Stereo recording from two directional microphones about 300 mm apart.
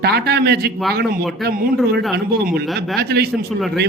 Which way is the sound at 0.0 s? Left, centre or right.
Right.